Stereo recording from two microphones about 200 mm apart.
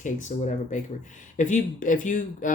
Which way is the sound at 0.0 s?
40° left (ahead or behind).